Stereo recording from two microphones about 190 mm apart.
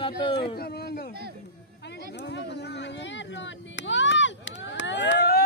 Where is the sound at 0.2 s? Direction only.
25° left (ahead or behind).